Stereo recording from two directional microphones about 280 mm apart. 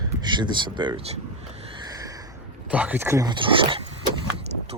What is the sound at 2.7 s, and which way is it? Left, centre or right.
Speech, centre.